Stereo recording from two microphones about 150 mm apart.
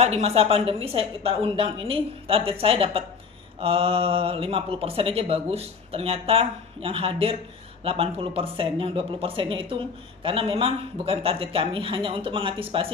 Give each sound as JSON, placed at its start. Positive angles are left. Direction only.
{"t": 0.0, "sound": "speech", "side_deg": -45}